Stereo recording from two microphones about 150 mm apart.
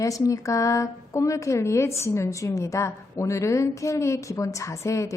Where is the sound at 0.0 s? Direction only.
20° left (ahead or behind).